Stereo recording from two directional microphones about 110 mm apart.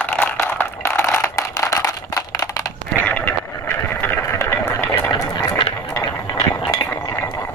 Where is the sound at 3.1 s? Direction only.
15° left (ahead or behind).